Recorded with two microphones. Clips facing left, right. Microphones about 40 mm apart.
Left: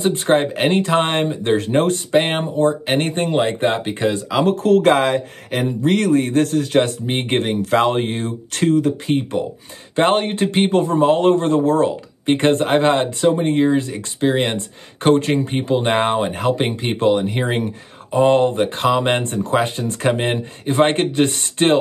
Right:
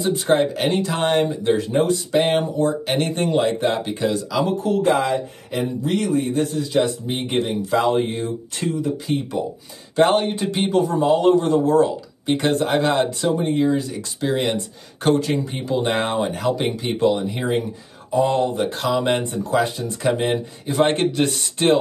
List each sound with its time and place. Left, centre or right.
0.0 s speech: left
2.1 s speech: left
4.5 s speech: left
8.6 s speech: left
9.0 s speech: left